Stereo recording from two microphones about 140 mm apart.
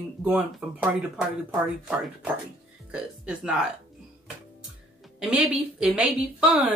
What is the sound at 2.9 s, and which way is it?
Speech, 5° right (ahead or behind).